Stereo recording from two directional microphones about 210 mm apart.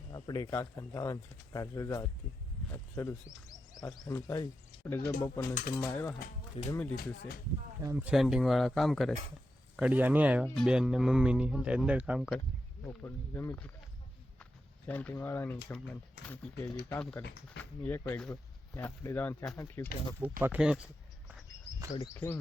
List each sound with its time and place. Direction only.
0.1 s speech: 20° left (ahead or behind)
6.6 s speech: 30° left (ahead or behind)
6.9 s speech: 45° left (ahead or behind)
7.8 s speech: 10° right (ahead or behind)
12.8 s speech: 10° left (ahead or behind)
14.8 s speech: 10° left (ahead or behind)
20.4 s speech: 5° right (ahead or behind)
21.9 s speech: 15° left (ahead or behind)